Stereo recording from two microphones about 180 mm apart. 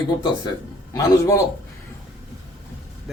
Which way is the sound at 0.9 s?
20° left (ahead or behind).